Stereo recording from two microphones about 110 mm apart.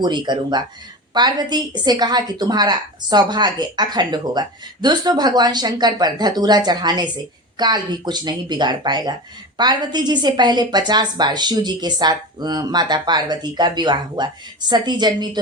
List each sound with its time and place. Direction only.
0.0 s a woman's voice: 40° right (ahead or behind)